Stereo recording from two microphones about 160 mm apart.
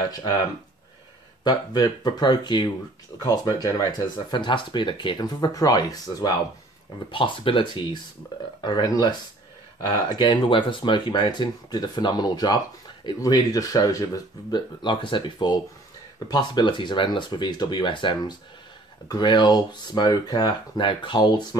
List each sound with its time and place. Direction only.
1.4 s speech: 25° left (ahead or behind)